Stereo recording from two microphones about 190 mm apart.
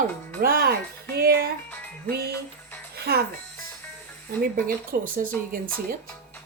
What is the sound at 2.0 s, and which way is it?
Music, 55° right (ahead or behind).